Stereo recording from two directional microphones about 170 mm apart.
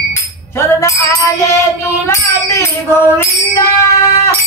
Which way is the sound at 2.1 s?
15° left (ahead or behind).